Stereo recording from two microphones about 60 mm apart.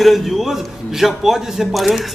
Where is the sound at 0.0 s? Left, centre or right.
Centre.